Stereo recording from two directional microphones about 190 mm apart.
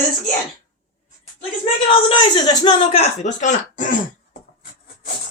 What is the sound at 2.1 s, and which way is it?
Speech, 25° left (ahead or behind).